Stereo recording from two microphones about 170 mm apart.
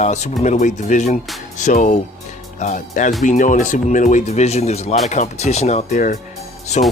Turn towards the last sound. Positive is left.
turn(degrees=45)  # may be behind; listen again after turning